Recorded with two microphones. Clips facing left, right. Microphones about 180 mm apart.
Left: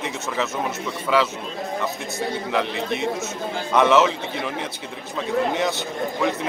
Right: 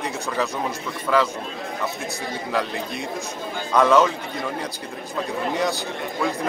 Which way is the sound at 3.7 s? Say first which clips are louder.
Even; 5° left (ahead or behind).